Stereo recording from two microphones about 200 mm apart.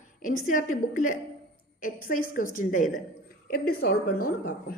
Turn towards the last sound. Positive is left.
turn(degrees=45)  # may be behind; listen again after turning